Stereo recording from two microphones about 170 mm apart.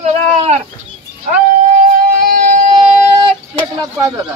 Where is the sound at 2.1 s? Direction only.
50° right (ahead or behind).